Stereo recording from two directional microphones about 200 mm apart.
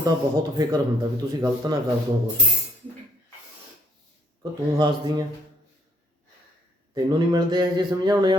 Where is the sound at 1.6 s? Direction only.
20° right (ahead or behind).